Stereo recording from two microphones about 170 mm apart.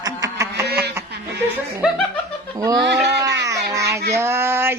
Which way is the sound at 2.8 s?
90° right.